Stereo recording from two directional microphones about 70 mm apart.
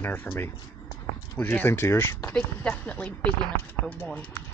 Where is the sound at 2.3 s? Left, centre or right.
Centre.